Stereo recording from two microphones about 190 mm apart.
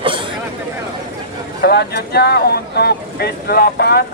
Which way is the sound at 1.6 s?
60° left (ahead or behind).